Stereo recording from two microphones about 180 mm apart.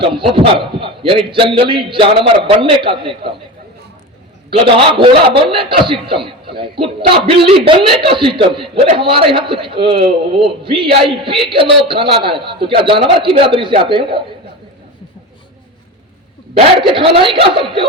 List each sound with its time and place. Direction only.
0.0 s a man's voice: 30° right (ahead or behind)
4.5 s a man's voice: 30° right (ahead or behind)
17.2 s a man's voice: 30° right (ahead or behind)